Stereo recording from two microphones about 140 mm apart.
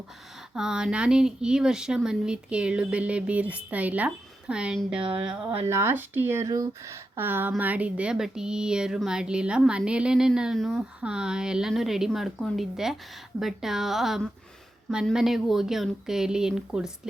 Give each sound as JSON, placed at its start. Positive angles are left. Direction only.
{"t": 0.5, "sound": "speech", "side_deg": -5}
{"t": 5.6, "sound": "speech", "side_deg": -20}